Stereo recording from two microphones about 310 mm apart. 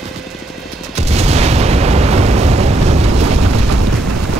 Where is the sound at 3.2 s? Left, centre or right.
Right.